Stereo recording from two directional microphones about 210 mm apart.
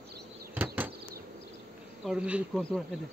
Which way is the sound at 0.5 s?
10° right (ahead or behind).